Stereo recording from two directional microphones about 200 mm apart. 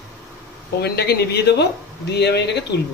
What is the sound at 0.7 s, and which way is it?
Speech, 55° left (ahead or behind).